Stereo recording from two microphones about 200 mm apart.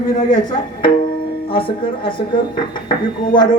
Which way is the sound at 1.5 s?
25° left (ahead or behind).